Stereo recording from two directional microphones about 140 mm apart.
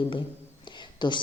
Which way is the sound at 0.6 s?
35° left (ahead or behind).